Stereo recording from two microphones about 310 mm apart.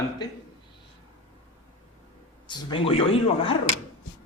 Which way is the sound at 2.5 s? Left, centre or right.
Centre.